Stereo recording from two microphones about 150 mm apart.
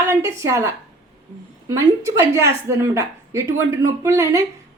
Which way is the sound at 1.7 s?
20° right (ahead or behind).